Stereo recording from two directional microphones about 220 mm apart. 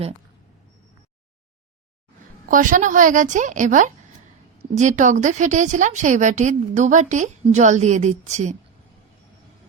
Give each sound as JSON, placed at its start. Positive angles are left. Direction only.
{"t": 2.5, "sound": "a woman's voice", "side_deg": -35}